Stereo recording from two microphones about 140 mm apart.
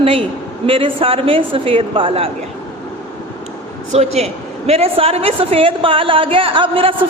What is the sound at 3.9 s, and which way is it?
A woman's voice, 50° right (ahead or behind).